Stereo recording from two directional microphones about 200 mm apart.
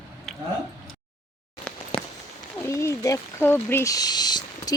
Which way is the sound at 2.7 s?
15° left (ahead or behind).